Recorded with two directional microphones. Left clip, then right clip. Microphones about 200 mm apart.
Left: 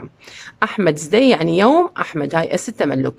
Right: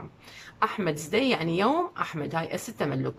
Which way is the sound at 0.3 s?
50° left (ahead or behind).